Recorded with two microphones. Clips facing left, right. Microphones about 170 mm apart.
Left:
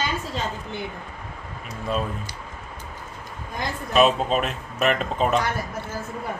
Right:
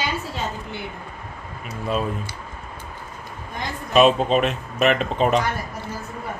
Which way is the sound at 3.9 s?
Centre (ahead or behind).